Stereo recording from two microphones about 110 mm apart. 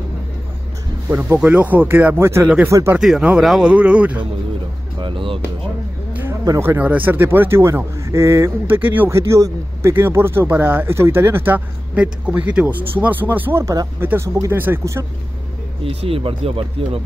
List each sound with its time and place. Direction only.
1.0 s speech: 20° right (ahead or behind)
2.4 s speech: 10° right (ahead or behind)
2.7 s a man's voice: 25° right (ahead or behind)
3.0 s speech: 5° right (ahead or behind)
5.0 s speech: 50° right (ahead or behind)
6.4 s a man's voice: 25° right (ahead or behind)
15.8 s speech: 65° right (ahead or behind)